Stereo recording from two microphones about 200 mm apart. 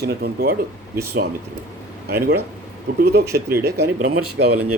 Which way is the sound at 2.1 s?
50° right (ahead or behind).